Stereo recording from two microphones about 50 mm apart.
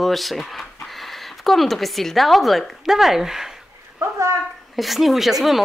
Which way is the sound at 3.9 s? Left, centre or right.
Right.